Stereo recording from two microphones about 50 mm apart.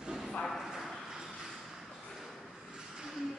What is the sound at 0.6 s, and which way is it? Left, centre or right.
Clip-clop, centre.